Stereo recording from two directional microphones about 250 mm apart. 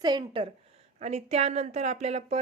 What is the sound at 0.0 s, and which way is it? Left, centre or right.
A woman's voice, centre.